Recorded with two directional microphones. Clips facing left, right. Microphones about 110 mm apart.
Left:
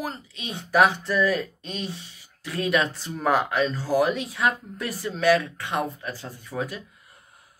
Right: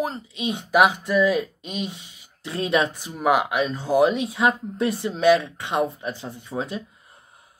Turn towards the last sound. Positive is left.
turn(degrees=-25)  # may be behind; listen again after turning